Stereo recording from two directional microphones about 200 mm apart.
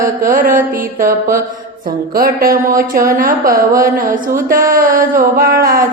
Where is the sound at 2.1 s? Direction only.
45° right (ahead or behind).